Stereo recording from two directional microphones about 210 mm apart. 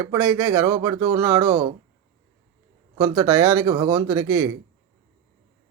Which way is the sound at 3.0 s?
10° right (ahead or behind).